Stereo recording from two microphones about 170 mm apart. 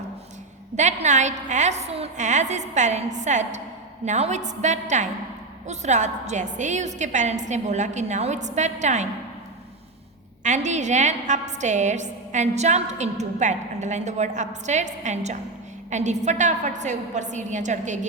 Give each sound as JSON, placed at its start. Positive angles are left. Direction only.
{"t": 0.8, "sound": "a woman's voice", "side_deg": -45}
{"t": 10.4, "sound": "a woman's voice", "side_deg": -45}